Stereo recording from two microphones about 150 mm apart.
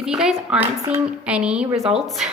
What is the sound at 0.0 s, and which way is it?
A woman's voice, 5° right (ahead or behind).